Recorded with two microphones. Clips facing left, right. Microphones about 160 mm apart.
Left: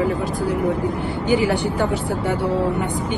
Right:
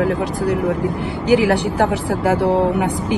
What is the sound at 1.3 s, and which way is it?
Speech, 80° right.